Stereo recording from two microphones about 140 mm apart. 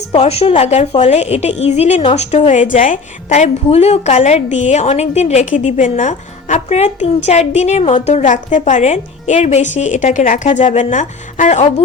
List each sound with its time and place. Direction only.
0.1 s a woman's voice: 45° left (ahead or behind)